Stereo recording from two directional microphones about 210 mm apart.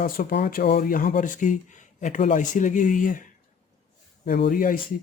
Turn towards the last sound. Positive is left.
turn(degrees=40)  # may be behind; listen again after turning